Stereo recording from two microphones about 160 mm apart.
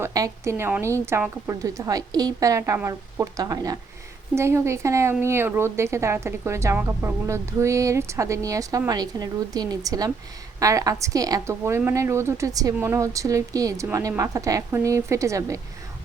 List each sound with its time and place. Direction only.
0.0 s a woman's voice: 20° right (ahead or behind)